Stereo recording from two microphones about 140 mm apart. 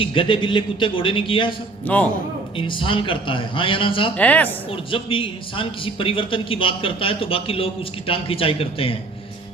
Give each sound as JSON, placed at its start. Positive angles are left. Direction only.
{"t": 0.0, "sound": "a man's voice", "side_deg": 40}
{"t": 1.9, "sound": "a woman's voice", "side_deg": 10}
{"t": 2.6, "sound": "a man's voice", "side_deg": 35}
{"t": 4.2, "sound": "a woman's voice", "side_deg": 10}
{"t": 4.9, "sound": "a man's voice", "side_deg": 40}